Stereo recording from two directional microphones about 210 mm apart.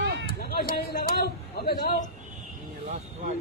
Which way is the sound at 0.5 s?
45° left (ahead or behind).